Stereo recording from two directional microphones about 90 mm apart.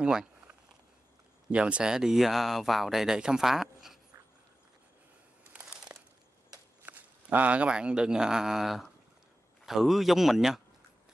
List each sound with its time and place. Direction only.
0.0 s speech: 10° right (ahead or behind)
1.5 s speech: 10° right (ahead or behind)
5.4 s crumpling: 15° right (ahead or behind)
6.9 s speech: 20° right (ahead or behind); by 10.6 s 5° right (ahead or behind)